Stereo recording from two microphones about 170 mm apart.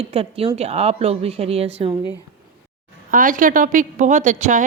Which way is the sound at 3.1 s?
50° right (ahead or behind).